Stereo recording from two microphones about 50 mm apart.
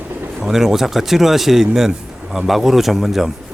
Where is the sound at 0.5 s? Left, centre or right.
Centre.